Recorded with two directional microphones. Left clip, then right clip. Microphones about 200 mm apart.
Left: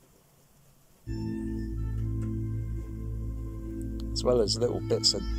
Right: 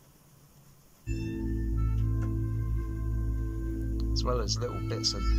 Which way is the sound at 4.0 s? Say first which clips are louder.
Left 8 dB; 30° left (ahead or behind).